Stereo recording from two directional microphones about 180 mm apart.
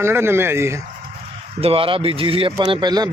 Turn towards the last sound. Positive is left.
turn(degrees=-20)  # may be behind; listen again after turning